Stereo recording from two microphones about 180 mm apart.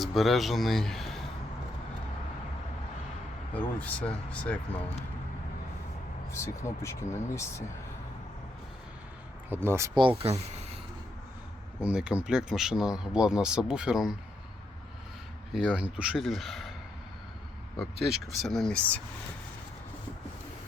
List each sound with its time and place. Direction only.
0.0 s speech: centre (ahead or behind)
3.5 s speech: 5° left (ahead or behind)
6.3 s speech: 15° left (ahead or behind)
9.5 s speech: 15° right (ahead or behind)
10.2 s speech: 35° right (ahead or behind)
11.8 s speech: 5° right (ahead or behind)
15.5 s speech: 5° right (ahead or behind)
17.7 s speech: centre (ahead or behind)